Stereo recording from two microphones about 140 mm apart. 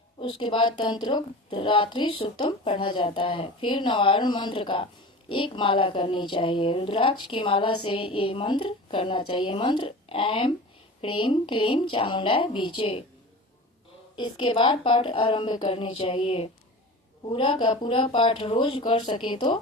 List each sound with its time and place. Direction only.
0.2 s a woman's voice: 35° left (ahead or behind)
14.2 s a woman's voice: 35° left (ahead or behind)